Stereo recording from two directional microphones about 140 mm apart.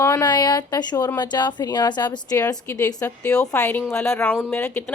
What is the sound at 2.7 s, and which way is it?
A woman's voice, 15° left (ahead or behind).